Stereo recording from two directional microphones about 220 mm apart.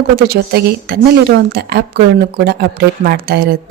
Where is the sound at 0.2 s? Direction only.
45° right (ahead or behind).